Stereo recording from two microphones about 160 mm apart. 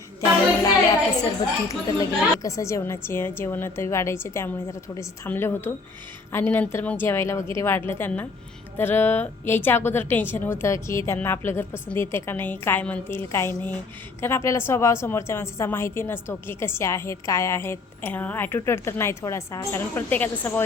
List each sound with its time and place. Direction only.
1.2 s a woman's voice: 20° left (ahead or behind)